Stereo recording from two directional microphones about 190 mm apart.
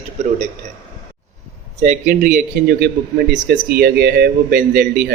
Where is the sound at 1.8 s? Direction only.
40° right (ahead or behind).